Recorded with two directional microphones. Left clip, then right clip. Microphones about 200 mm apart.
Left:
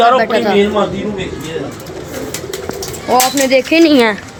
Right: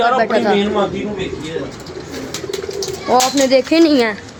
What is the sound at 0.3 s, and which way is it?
Speech, 10° right (ahead or behind).